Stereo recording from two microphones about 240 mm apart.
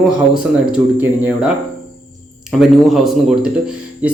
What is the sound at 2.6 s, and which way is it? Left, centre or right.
Speech, centre.